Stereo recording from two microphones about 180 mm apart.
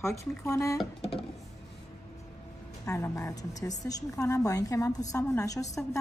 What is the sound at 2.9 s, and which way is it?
A woman's voice, 15° left (ahead or behind).